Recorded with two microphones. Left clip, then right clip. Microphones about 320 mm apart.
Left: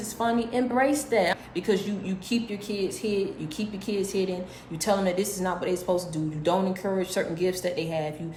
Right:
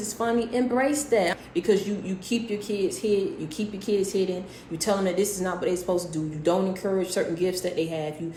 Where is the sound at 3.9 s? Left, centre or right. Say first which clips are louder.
Right 5 dB; left.